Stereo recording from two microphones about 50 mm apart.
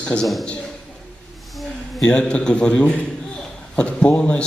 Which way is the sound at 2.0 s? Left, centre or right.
Left.